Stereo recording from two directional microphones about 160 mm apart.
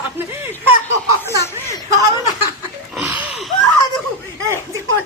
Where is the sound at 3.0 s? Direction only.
10° right (ahead or behind).